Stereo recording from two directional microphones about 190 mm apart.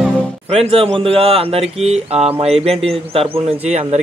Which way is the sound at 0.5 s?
30° right (ahead or behind).